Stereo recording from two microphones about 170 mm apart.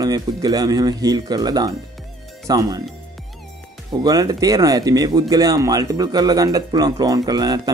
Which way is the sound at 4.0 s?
20° right (ahead or behind).